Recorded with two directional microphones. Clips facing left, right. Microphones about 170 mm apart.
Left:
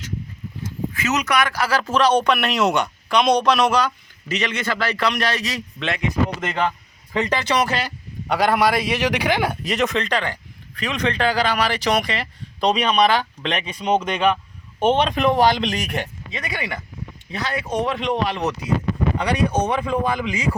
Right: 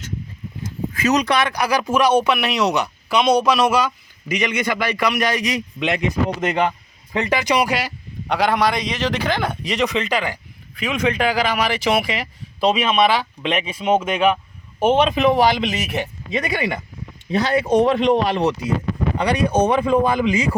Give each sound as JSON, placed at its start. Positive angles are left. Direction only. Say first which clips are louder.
{"t": 1.0, "sound": "speech", "louder": "right 3 dB", "side_deg": -35}
{"t": 8.3, "sound": "a man's voice", "louder": "even", "side_deg": 0}
{"t": 16.3, "sound": "a man's voice", "louder": "right 8 dB", "side_deg": -20}
{"t": 19.7, "sound": "a man's voice", "louder": "right 5 dB", "side_deg": -30}